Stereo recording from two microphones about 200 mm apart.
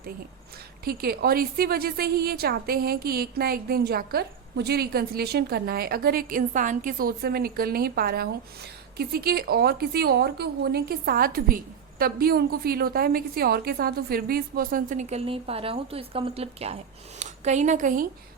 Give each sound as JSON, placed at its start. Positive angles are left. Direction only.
{"t": 0.9, "sound": "a woman's voice", "side_deg": -50}